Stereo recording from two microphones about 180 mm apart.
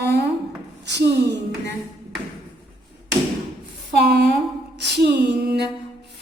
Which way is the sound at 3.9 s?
65° right (ahead or behind).